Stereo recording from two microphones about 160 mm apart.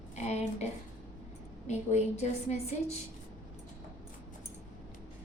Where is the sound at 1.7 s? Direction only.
45° left (ahead or behind).